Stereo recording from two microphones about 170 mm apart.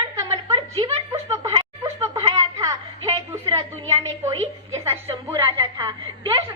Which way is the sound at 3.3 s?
15° right (ahead or behind).